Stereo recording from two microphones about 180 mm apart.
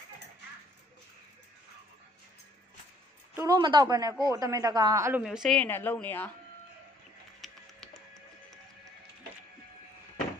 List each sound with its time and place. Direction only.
3.3 s speech: 20° right (ahead or behind)
5.2 s a woman's voice: centre (ahead or behind)
7.4 s music: centre (ahead or behind)